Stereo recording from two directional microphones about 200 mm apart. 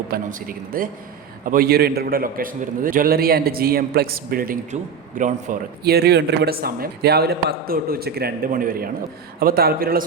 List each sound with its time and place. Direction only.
0.1 s a man's voice: 45° right (ahead or behind)